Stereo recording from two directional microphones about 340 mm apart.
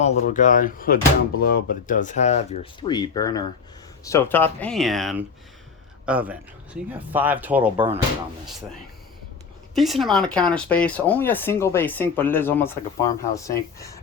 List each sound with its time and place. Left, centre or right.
0.0 s speech: left; by 7.9 s centre
9.7 s speech: centre